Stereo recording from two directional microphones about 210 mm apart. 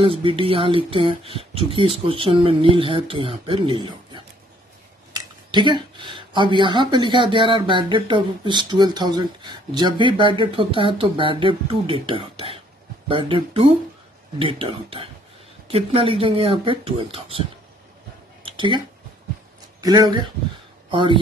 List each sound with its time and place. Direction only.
0.0 s speech: 25° right (ahead or behind)
18.4 s a sound: 25° right (ahead or behind)
19.8 s speech: 20° right (ahead or behind)